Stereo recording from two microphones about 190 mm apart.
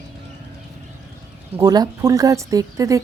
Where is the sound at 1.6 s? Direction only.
20° right (ahead or behind).